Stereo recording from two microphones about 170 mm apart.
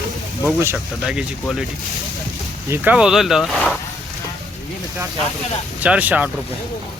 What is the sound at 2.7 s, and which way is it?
Speech, 5° right (ahead or behind).